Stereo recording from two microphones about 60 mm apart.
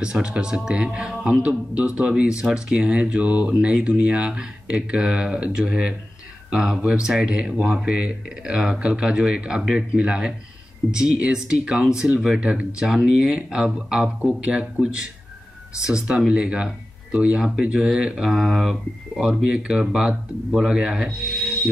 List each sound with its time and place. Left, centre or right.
0.0 s speech: centre